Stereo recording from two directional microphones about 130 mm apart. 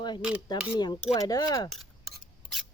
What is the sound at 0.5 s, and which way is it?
Speech, 30° left (ahead or behind).